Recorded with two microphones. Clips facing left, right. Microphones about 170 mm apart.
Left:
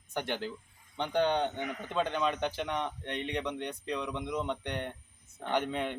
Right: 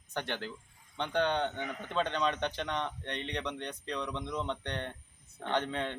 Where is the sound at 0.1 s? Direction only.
15° left (ahead or behind).